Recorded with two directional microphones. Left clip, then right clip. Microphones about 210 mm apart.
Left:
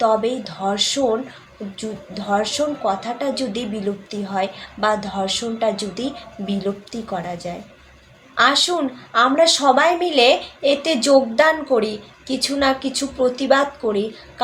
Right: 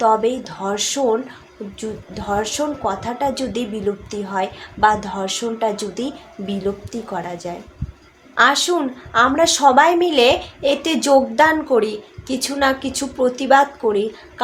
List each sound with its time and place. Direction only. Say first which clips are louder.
0.0 s a woman's voice: right 2 dB; 15° right (ahead or behind)